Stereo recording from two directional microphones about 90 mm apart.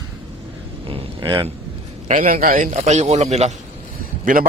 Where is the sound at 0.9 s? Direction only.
65° right (ahead or behind).